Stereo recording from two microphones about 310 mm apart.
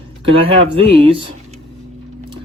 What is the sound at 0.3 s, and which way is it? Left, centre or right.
Speech, centre.